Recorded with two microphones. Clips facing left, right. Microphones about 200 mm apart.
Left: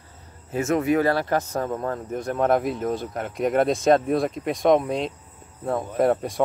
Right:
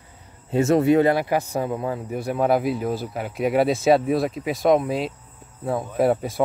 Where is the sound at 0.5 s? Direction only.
30° right (ahead or behind).